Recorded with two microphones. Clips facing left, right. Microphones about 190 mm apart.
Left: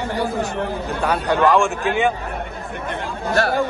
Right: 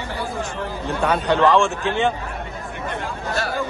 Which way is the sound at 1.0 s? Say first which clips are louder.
Right 1 dB; 10° left (ahead or behind).